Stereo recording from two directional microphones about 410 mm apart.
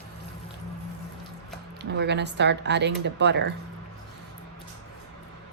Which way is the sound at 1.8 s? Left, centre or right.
Right.